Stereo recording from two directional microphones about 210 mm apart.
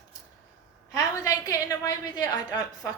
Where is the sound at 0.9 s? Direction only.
15° left (ahead or behind).